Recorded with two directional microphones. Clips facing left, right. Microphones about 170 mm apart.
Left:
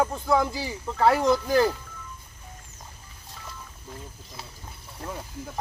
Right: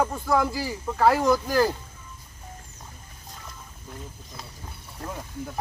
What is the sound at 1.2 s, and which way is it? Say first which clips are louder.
Speech: even; 25° left (ahead or behind).